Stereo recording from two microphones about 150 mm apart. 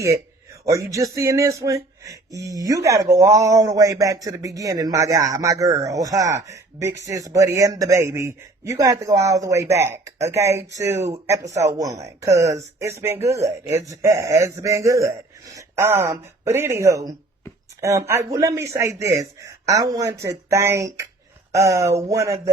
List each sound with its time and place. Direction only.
0.6 s speech: 20° right (ahead or behind)